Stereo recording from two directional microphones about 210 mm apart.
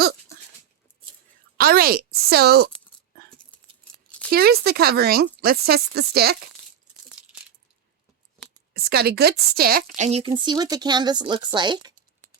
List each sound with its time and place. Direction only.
1.5 s speech: 45° right (ahead or behind)
3.1 s a sound: 45° right (ahead or behind)
4.3 s speech: 50° right (ahead or behind)
8.7 s a woman's voice: 50° right (ahead or behind); by 11.9 s 20° right (ahead or behind)